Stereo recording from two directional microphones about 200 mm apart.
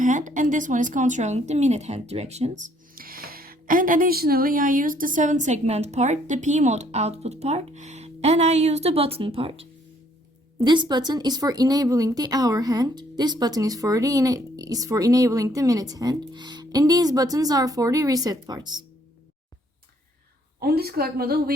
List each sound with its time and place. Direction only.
0.0 s a woman's voice: 40° right (ahead or behind); by 18.9 s 20° right (ahead or behind)
20.6 s speech: 50° right (ahead or behind)